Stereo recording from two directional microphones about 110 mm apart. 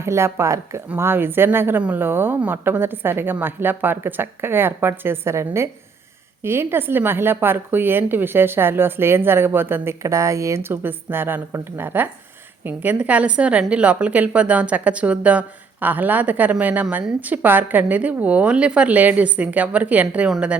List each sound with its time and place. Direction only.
0.0 s a woman's voice: 25° right (ahead or behind)